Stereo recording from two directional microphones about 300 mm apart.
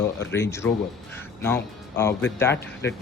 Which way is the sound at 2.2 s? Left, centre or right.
Centre.